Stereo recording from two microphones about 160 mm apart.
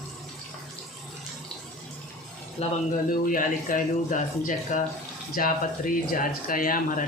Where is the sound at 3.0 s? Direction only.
60° left (ahead or behind).